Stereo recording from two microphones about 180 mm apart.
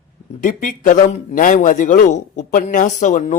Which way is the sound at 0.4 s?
50° left (ahead or behind).